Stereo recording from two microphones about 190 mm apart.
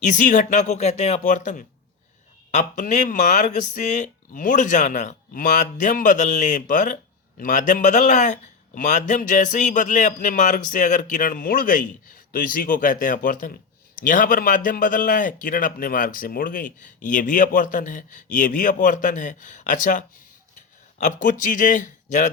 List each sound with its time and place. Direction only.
0.0 s speech: 45° left (ahead or behind)